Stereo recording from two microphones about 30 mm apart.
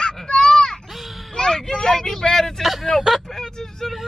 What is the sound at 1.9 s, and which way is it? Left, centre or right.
Vehicle, left.